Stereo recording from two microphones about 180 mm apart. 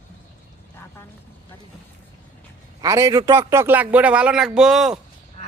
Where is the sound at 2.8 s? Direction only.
20° right (ahead or behind); by 5.0 s 5° right (ahead or behind).